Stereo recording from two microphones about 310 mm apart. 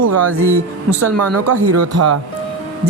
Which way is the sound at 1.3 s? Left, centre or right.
Right.